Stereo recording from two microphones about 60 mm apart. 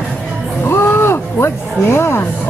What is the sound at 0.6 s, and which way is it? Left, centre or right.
Speech, left.